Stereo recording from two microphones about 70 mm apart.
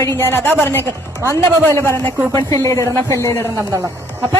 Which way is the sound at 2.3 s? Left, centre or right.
Left.